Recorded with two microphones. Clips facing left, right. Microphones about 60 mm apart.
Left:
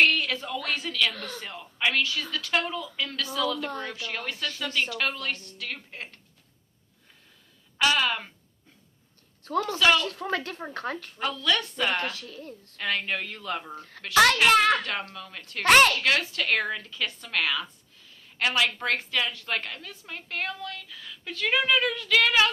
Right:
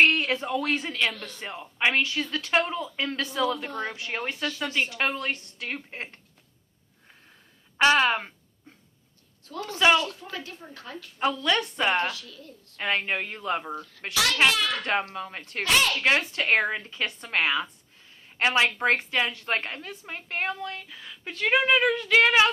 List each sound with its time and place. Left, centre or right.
0.0 s speech: right
1.1 s a child's voice: left
1.4 s a woman's voice: right
7.8 s speech: right
9.7 s a woman's voice: right
10.0 s speech: left
11.2 s a woman's voice: right
12.1 s speech: left
12.7 s a woman's voice: right
14.1 s a child's voice: left
14.8 s a woman's voice: right
15.6 s a child's voice: left
16.0 s a woman's voice: right